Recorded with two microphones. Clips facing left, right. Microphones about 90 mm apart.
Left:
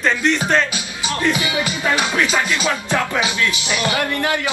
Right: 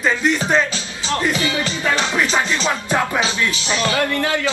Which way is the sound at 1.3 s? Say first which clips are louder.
Even; 15° left (ahead or behind).